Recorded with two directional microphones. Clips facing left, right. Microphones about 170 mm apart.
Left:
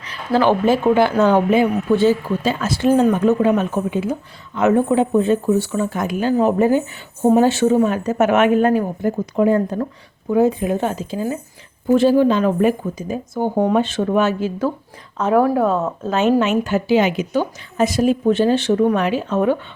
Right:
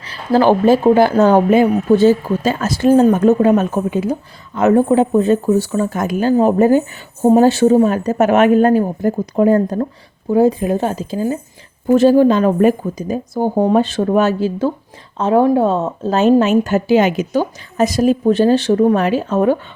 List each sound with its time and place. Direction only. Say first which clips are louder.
0.0 s speech: right 3 dB; 35° right (ahead or behind)